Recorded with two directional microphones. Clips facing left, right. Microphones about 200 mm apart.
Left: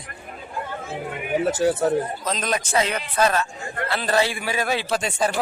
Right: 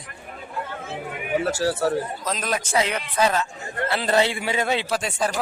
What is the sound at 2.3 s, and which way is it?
A man's voice, 5° right (ahead or behind).